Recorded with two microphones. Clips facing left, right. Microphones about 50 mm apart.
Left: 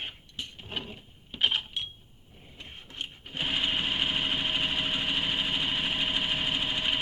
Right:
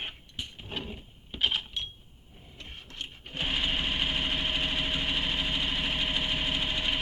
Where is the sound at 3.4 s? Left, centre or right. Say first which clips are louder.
Left 1 dB; centre.